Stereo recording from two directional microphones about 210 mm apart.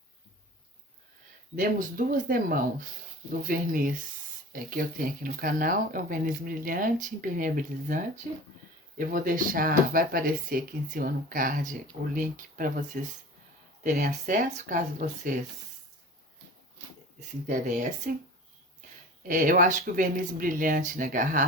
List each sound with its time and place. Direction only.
1.5 s speech: 40° right (ahead or behind)
17.2 s speech: 40° right (ahead or behind)
19.3 s speech: 40° right (ahead or behind)